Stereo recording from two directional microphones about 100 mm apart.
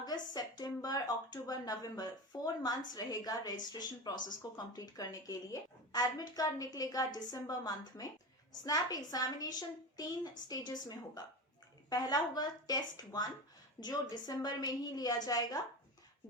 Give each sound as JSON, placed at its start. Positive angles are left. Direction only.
{"t": 0.0, "sound": "a woman's voice", "side_deg": 40}